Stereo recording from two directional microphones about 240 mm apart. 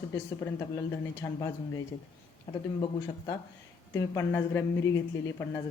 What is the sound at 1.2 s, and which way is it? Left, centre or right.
Speech, centre.